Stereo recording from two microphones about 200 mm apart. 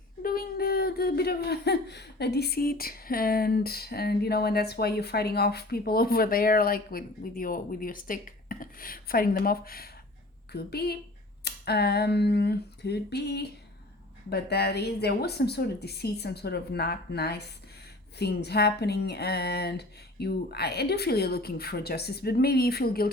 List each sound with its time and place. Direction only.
0.2 s speech: 50° left (ahead or behind)